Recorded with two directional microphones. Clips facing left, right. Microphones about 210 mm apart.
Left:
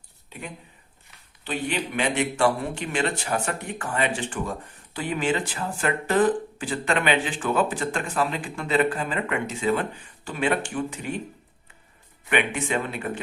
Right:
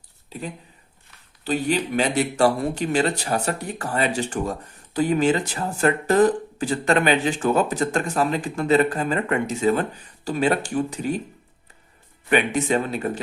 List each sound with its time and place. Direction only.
0.3 s speech: 35° right (ahead or behind)
12.3 s speech: 40° right (ahead or behind)